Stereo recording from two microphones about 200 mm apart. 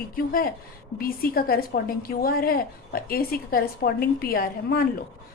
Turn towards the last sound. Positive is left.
turn(degrees=50)  # may be behind; listen again after turning